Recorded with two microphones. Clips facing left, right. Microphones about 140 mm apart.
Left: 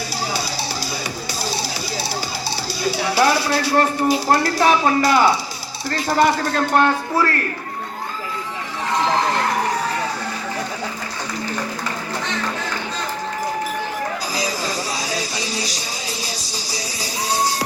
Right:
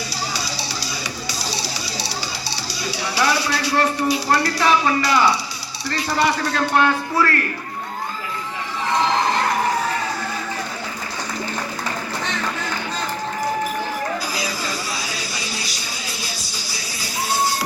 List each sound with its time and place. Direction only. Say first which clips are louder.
2.8 s speech: left 4 dB; 45° left (ahead or behind)
14.3 s music: left 3 dB; 40° left (ahead or behind)